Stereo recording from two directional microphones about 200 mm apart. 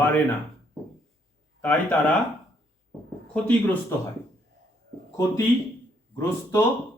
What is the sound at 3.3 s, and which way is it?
Speech, 10° left (ahead or behind).